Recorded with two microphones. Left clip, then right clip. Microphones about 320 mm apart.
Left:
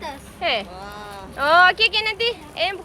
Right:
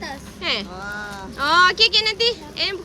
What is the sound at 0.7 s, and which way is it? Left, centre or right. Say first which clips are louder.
Speech: right 4 dB; right.